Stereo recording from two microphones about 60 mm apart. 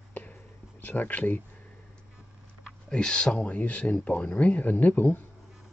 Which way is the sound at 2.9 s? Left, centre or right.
Centre.